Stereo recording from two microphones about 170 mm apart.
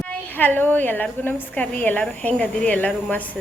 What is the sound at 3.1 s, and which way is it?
Speech, 10° left (ahead or behind).